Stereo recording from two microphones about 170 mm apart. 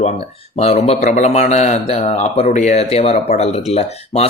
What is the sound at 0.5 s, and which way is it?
Speech, 40° left (ahead or behind).